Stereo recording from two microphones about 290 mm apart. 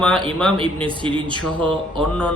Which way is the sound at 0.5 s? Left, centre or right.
Centre.